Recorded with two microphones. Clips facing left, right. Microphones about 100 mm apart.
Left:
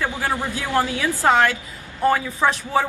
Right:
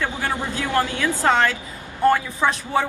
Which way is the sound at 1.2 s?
5° left (ahead or behind).